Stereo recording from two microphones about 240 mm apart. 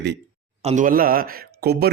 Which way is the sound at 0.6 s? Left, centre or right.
Right.